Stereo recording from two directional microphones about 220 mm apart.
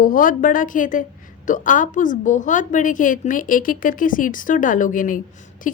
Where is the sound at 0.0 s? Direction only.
40° left (ahead or behind).